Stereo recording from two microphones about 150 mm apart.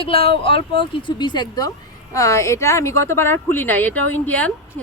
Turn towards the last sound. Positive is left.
turn(degrees=10)  # may be behind; listen again after turning